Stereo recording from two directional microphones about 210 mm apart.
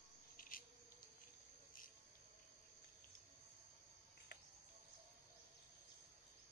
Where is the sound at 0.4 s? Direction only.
40° left (ahead or behind).